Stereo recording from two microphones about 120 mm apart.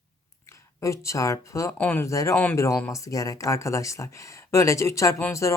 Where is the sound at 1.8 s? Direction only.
15° left (ahead or behind).